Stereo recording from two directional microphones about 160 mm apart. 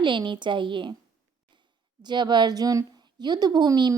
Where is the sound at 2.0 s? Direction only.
25° right (ahead or behind).